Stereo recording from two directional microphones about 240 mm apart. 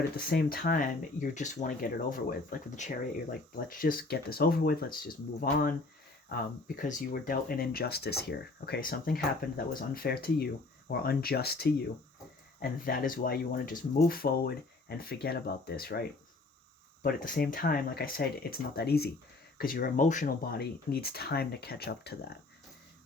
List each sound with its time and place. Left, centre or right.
0.2 s speech: left